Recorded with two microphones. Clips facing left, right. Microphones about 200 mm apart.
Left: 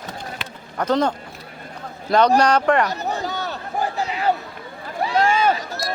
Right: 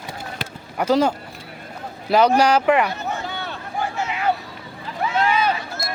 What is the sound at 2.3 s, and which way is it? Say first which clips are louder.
Speech: even; 5° right (ahead or behind).